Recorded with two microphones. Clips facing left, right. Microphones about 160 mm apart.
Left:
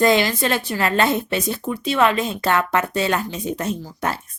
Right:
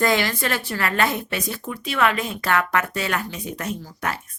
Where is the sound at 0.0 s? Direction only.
20° left (ahead or behind).